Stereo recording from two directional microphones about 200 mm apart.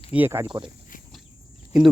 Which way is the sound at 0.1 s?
10° right (ahead or behind).